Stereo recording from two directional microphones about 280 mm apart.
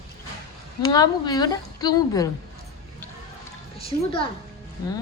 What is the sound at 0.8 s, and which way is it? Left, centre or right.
A woman's voice, centre.